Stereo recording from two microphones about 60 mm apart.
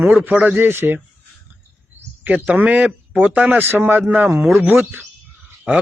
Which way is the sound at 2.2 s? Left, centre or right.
Right.